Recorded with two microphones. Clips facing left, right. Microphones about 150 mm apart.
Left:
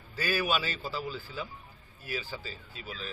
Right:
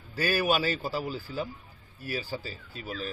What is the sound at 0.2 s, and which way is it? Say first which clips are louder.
A man's voice: right 4 dB; 45° right (ahead or behind).